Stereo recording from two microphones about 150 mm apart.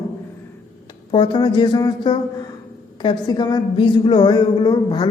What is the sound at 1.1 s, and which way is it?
A man's voice, 35° left (ahead or behind).